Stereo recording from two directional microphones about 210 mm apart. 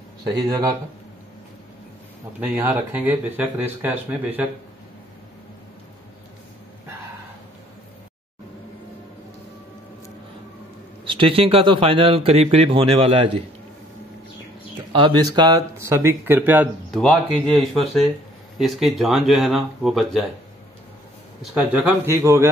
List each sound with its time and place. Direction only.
0.2 s speech: 20° right (ahead or behind)
2.4 s speech: 5° right (ahead or behind)
11.1 s speech: 25° right (ahead or behind)
14.9 s speech: 25° right (ahead or behind)
16.9 s speech: centre (ahead or behind)
21.5 s speech: 5° right (ahead or behind)